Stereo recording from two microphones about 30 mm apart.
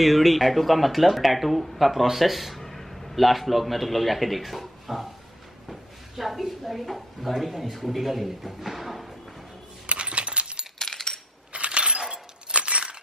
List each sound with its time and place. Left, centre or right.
0.0 s speech: centre
2.6 s a man's voice: centre
8.6 s music: centre
9.8 s coin: right
10.8 s coin: centre
11.5 s coin: right
12.1 s a sound: right